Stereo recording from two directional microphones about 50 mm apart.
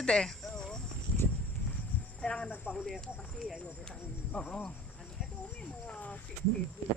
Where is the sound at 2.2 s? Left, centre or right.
Centre.